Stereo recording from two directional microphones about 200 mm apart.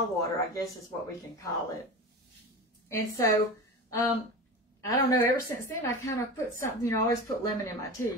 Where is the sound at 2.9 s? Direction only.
15° left (ahead or behind).